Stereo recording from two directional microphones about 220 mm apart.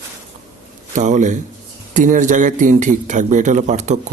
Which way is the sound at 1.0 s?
35° right (ahead or behind).